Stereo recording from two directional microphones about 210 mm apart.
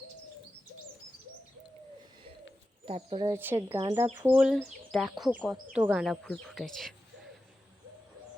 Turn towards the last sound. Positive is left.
turn(degrees=0)  # may be behind; listen again after turning